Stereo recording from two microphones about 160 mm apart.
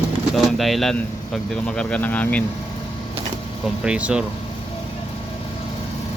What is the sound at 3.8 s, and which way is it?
Speech, 5° right (ahead or behind).